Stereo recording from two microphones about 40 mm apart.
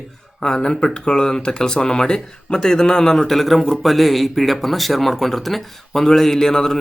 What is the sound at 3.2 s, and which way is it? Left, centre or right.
Speech, centre.